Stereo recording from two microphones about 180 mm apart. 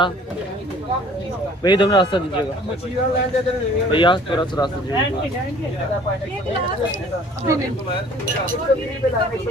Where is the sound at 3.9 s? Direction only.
25° left (ahead or behind).